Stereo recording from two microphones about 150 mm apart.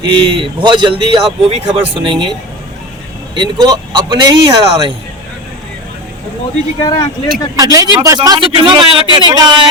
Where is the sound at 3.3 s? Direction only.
30° right (ahead or behind).